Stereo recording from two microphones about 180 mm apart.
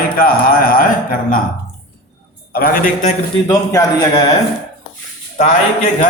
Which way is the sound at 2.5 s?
55° left (ahead or behind).